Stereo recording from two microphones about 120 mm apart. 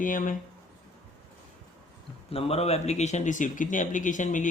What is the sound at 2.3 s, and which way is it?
A man's voice, 55° left (ahead or behind).